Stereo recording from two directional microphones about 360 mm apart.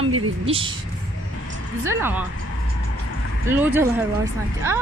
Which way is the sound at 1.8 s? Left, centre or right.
Centre.